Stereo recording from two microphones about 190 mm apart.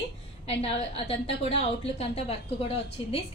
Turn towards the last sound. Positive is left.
turn(degrees=30)  # may be behind; listen again after turning